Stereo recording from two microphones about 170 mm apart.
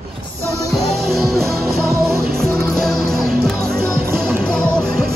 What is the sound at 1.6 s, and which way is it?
Music, 15° right (ahead or behind).